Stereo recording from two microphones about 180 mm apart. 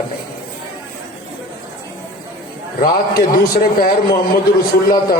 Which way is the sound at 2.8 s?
55° left (ahead or behind).